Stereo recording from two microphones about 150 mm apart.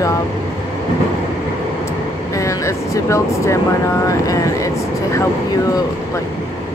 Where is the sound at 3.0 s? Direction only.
20° left (ahead or behind).